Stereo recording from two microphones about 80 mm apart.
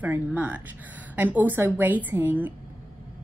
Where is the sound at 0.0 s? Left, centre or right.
Right.